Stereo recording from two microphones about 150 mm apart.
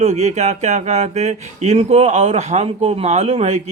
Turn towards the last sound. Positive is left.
turn(degrees=-45)  # may be behind; listen again after turning